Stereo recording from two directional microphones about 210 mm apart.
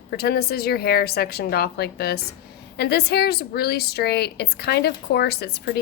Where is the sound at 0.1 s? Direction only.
50° left (ahead or behind).